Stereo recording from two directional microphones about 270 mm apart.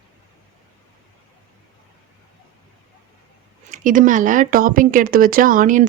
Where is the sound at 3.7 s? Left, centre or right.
Right.